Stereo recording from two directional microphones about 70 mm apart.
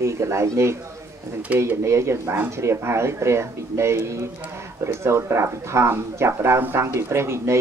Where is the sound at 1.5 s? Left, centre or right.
Right.